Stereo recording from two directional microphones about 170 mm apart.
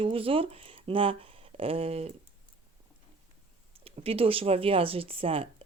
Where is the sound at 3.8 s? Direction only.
35° right (ahead or behind).